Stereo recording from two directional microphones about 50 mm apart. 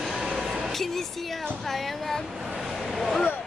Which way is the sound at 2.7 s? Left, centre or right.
Centre.